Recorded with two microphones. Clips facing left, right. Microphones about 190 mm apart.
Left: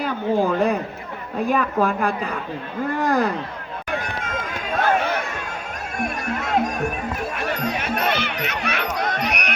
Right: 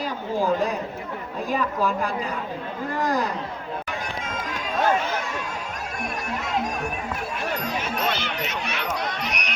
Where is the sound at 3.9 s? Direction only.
55° left (ahead or behind).